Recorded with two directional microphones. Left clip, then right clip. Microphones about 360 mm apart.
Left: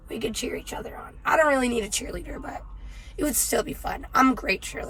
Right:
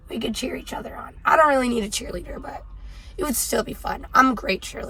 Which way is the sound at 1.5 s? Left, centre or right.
Centre.